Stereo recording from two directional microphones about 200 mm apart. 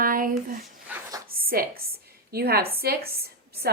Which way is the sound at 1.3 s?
50° right (ahead or behind).